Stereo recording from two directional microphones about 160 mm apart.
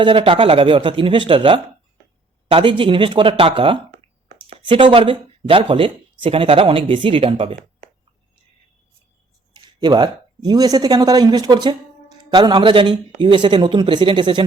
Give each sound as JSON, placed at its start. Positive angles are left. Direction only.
{"t": 0.0, "sound": "speech", "side_deg": -30}
{"t": 9.5, "sound": "speech", "side_deg": -30}